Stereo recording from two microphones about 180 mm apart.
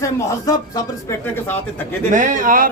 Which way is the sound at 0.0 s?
20° left (ahead or behind).